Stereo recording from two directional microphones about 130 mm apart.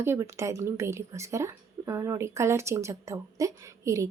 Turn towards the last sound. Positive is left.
turn(degrees=-25)  # may be behind; listen again after turning